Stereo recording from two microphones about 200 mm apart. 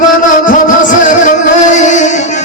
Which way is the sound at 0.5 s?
40° left (ahead or behind).